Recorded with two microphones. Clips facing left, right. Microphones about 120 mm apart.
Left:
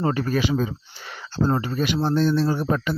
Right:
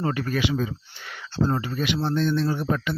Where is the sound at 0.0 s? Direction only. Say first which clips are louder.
Left 3 dB; 35° left (ahead or behind).